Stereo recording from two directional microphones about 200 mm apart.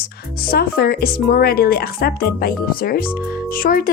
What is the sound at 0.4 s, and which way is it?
Speech, 50° left (ahead or behind).